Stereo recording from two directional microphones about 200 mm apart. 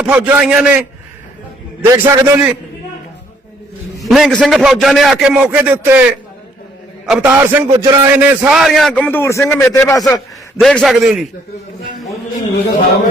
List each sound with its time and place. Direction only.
0.0 s a man's voice: 5° right (ahead or behind)
4.0 s a man's voice: centre (ahead or behind)
7.1 s a man's voice: 5° right (ahead or behind); by 10.2 s 15° left (ahead or behind)
10.6 s a man's voice: centre (ahead or behind)